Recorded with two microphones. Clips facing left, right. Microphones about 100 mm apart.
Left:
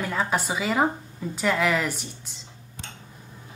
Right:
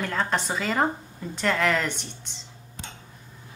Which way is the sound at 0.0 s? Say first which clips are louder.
Left 1 dB; 5° left (ahead or behind).